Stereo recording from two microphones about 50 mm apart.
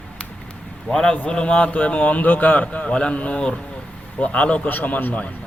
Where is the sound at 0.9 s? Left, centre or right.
Centre.